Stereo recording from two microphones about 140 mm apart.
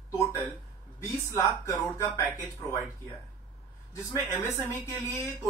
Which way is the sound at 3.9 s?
20° left (ahead or behind).